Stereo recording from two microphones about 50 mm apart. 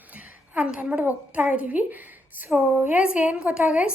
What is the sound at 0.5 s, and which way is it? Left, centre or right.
Speech, centre.